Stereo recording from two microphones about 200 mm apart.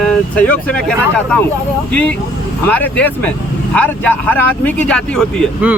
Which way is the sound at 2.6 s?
10° left (ahead or behind).